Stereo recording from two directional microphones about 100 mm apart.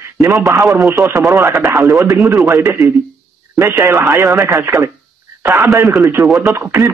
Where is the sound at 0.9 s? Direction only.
30° right (ahead or behind).